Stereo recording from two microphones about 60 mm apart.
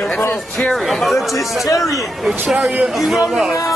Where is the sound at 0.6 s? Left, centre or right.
Centre.